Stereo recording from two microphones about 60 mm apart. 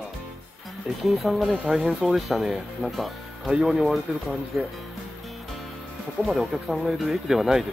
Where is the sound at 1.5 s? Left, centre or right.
Centre.